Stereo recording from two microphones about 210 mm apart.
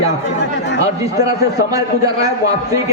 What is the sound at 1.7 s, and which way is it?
Speech, 15° right (ahead or behind).